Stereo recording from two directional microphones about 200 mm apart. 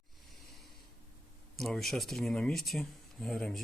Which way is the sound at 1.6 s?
Centre (ahead or behind).